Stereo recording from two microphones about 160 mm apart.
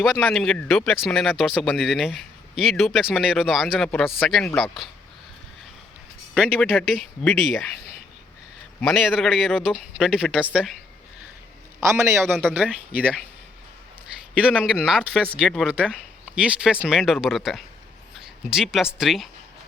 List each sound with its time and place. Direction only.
0.0 s speech: 5° left (ahead or behind)
6.3 s speech: centre (ahead or behind)
8.8 s speech: centre (ahead or behind)
12.3 s speech: 5° left (ahead or behind)
12.5 s speech: 10° right (ahead or behind)
14.4 s speech: 5° right (ahead or behind)